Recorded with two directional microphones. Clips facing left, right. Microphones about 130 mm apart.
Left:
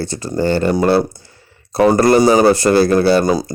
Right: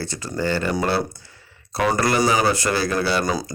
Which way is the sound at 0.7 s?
45° left (ahead or behind).